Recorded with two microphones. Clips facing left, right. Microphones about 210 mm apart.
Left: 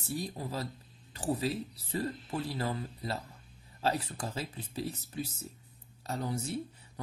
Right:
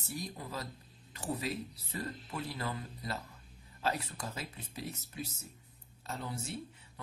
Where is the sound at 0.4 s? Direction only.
35° left (ahead or behind).